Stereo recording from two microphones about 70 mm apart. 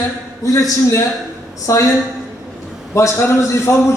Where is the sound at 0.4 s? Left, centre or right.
Left.